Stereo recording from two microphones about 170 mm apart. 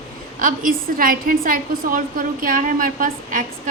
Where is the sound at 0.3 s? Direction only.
55° right (ahead or behind).